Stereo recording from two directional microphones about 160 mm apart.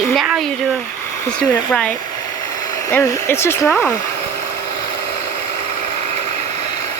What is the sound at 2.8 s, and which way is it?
Speech, 15° left (ahead or behind).